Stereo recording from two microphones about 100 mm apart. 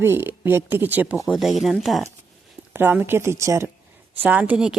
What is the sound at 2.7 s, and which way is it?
Speech, 20° right (ahead or behind).